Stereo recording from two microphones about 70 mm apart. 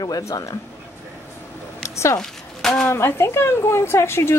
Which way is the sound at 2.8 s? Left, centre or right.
Left.